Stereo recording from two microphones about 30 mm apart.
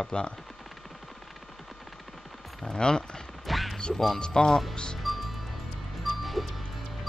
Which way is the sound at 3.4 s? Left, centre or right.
Centre.